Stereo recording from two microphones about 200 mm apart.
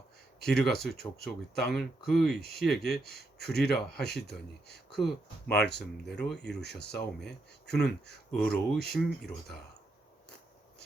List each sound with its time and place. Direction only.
0.4 s speech: centre (ahead or behind)
2.4 s speech: 50° left (ahead or behind)
4.9 s speech: centre (ahead or behind)
5.5 s speech: 55° left (ahead or behind)
6.1 s speech: 5° left (ahead or behind)
6.6 s speech: 55° left (ahead or behind)
7.2 s speech: centre (ahead or behind)